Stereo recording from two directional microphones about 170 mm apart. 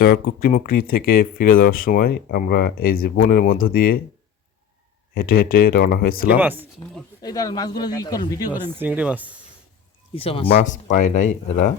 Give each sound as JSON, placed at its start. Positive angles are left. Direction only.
{"t": 0.0, "sound": "speech", "side_deg": 65}
{"t": 5.1, "sound": "speech", "side_deg": 60}
{"t": 6.3, "sound": "speech", "side_deg": -10}
{"t": 7.2, "sound": "speech", "side_deg": 20}
{"t": 8.4, "sound": "speech", "side_deg": -10}
{"t": 10.2, "sound": "speech", "side_deg": 35}
{"t": 10.5, "sound": "speech", "side_deg": 50}